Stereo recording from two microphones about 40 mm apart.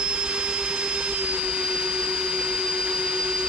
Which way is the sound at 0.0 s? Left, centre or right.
Right.